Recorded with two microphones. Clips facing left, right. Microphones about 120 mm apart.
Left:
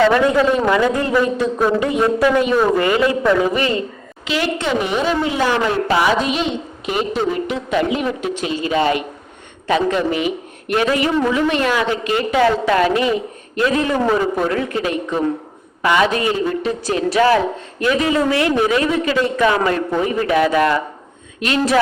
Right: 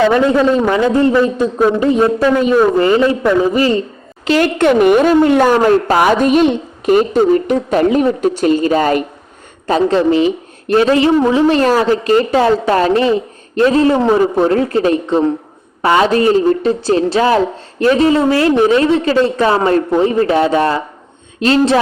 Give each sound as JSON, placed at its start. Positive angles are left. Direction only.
{"t": 0.1, "sound": "a man's voice", "side_deg": -30}
{"t": 4.3, "sound": "a woman's voice", "side_deg": -50}